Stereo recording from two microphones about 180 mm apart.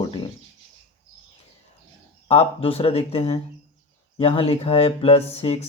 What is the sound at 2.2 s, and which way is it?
Speech, 30° left (ahead or behind).